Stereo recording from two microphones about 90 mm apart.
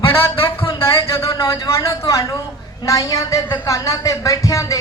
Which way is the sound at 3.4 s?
55° left (ahead or behind).